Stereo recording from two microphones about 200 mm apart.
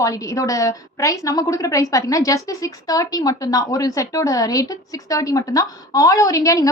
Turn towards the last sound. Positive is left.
turn(degrees=15)  # may be behind; listen again after turning